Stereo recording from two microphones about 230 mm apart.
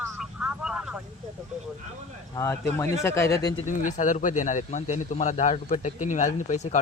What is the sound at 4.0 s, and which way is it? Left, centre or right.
Speech, left.